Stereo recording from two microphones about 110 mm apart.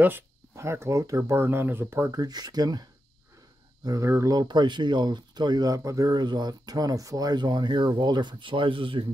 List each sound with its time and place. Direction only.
0.0 s speech: 20° right (ahead or behind)
2.1 s speech: 35° right (ahead or behind)